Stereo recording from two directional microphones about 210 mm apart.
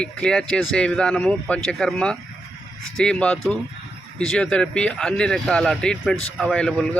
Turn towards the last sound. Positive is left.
turn(degrees=5)  # may be behind; listen again after turning